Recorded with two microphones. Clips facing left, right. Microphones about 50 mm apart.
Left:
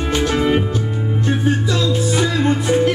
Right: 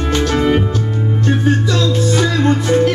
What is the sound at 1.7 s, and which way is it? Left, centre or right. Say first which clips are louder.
Music: right 3 dB; centre.